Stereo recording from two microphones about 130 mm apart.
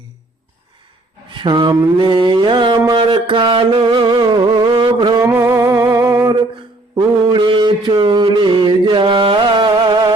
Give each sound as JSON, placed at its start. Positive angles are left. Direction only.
{"t": 1.3, "sound": "speech", "side_deg": -40}
{"t": 1.7, "sound": "music", "side_deg": -35}
{"t": 5.2, "sound": "music", "side_deg": -20}
{"t": 6.9, "sound": "mantra", "side_deg": -35}